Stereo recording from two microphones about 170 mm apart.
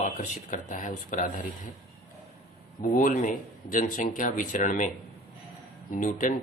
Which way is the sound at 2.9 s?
50° left (ahead or behind).